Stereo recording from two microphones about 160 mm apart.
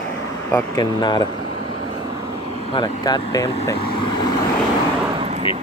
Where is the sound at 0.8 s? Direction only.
25° left (ahead or behind).